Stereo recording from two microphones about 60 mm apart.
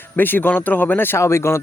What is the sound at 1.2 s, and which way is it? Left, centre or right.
Speech, left.